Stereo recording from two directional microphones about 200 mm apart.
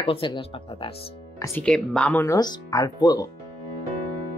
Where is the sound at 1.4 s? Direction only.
10° left (ahead or behind).